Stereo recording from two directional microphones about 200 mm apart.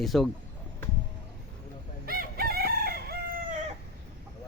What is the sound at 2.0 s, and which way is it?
Crowing, 50° right (ahead or behind).